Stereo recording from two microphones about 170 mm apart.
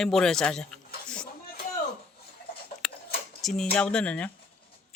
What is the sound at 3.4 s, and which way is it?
Speech, centre (ahead or behind).